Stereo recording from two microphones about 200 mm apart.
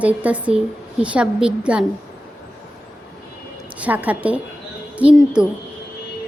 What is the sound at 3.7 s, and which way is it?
A woman's voice, 5° right (ahead or behind).